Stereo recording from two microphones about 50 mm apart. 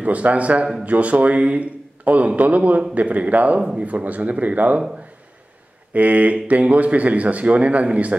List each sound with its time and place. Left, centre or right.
0.0 s a man's voice: right
5.9 s a man's voice: right